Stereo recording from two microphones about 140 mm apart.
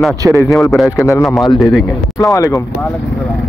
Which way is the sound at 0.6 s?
Centre (ahead or behind).